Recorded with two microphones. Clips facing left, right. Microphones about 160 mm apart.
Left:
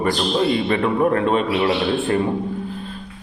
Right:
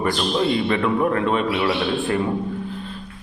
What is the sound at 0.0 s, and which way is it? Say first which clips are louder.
A man's voice: left 2 dB; 35° left (ahead or behind).